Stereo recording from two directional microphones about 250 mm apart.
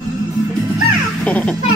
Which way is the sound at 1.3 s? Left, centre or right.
Centre.